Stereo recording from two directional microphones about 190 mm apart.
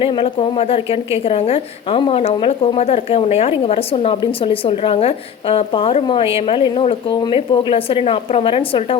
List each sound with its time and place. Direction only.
0.0 s a woman's voice: 30° left (ahead or behind)